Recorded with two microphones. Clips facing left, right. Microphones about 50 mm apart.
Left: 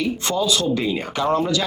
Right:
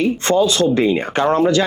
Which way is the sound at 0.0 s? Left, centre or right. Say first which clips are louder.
Right 7 dB; right.